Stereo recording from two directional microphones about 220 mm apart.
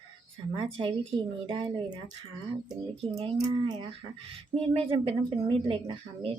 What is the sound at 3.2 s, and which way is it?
Speech, 25° right (ahead or behind).